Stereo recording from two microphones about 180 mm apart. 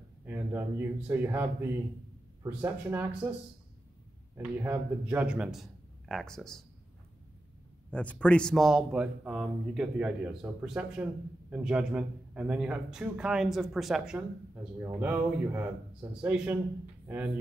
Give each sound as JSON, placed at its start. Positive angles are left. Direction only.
{"t": 0.2, "sound": "speech", "side_deg": -10}
{"t": 4.4, "sound": "speech", "side_deg": -10}
{"t": 7.9, "sound": "speech", "side_deg": 5}